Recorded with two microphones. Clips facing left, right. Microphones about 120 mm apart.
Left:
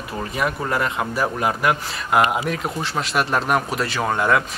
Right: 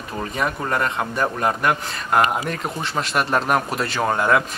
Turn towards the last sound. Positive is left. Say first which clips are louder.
# right 1 dB
turn(degrees=0)  # may be behind; listen again after turning